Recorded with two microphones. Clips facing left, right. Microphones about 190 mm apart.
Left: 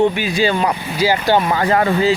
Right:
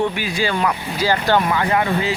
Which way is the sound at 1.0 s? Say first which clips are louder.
Left 2 dB; 15° left (ahead or behind).